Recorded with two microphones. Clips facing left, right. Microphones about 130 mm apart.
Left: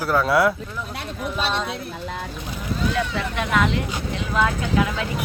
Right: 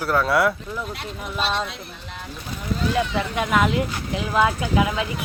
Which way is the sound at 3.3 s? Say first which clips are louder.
Right 1 dB; 10° right (ahead or behind).